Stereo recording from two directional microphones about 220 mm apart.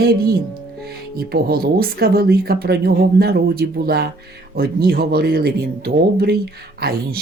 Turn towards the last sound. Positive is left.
turn(degrees=-45)  # may be behind; listen again after turning